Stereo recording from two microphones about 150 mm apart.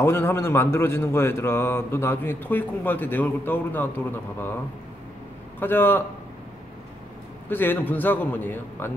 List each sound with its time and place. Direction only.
0.0 s speech: 15° left (ahead or behind)
5.6 s speech: 15° left (ahead or behind)
7.4 s speech: 15° left (ahead or behind)